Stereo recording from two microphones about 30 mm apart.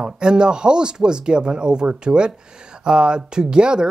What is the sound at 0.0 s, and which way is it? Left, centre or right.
Speech, right.